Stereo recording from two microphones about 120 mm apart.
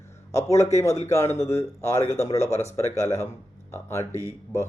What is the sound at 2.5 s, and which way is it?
Speech, 65° left (ahead or behind).